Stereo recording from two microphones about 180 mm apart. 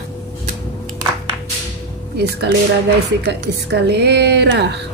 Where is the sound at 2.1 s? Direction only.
65° right (ahead or behind).